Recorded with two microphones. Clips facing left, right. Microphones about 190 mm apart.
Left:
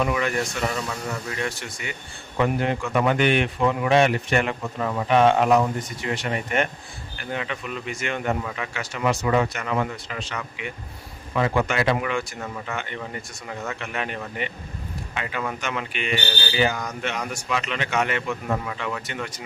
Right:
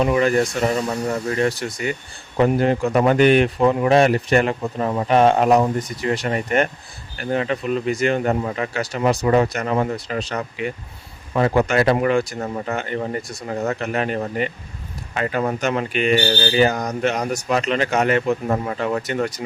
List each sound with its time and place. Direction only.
0.0 s speech: 35° right (ahead or behind)